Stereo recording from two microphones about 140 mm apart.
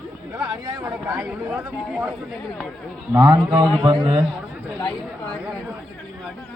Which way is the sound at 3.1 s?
25° right (ahead or behind).